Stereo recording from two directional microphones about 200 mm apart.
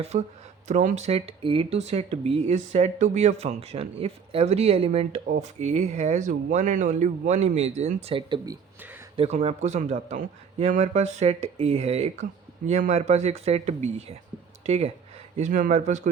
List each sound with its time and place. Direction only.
0.0 s speech: 35° right (ahead or behind)